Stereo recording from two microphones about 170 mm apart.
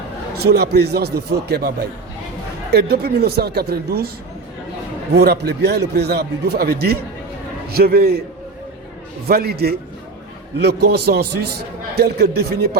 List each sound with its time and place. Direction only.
0.3 s a man's voice: 70° right (ahead or behind)
2.7 s a man's voice: 70° right (ahead or behind)
5.1 s a man's voice: 75° right (ahead or behind)
9.2 s a man's voice: 65° right (ahead or behind)